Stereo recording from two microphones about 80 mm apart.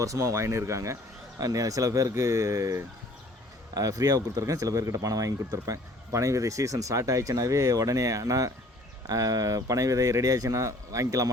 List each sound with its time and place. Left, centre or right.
0.0 s speech: right